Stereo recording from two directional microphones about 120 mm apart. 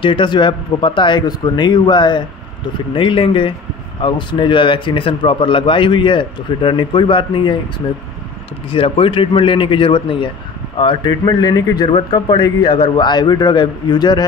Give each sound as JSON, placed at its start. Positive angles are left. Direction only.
{"t": 0.0, "sound": "speech", "side_deg": 45}
{"t": 8.6, "sound": "speech", "side_deg": 50}